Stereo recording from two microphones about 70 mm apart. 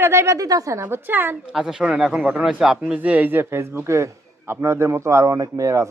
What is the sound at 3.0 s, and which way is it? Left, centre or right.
Speech, right.